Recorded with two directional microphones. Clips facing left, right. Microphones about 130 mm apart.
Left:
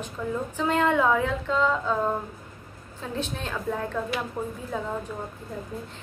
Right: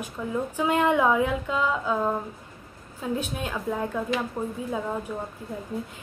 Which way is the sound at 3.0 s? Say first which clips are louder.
Right 3 dB; 10° right (ahead or behind).